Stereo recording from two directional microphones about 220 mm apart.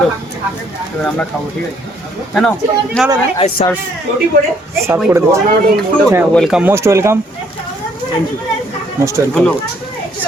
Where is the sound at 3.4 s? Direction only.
25° left (ahead or behind).